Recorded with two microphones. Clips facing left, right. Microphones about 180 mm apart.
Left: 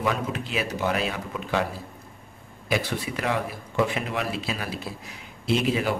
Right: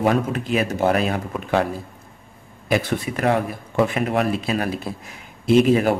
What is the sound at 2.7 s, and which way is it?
A man's voice, 50° right (ahead or behind).